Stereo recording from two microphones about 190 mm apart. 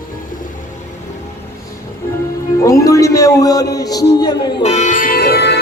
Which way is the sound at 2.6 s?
15° left (ahead or behind).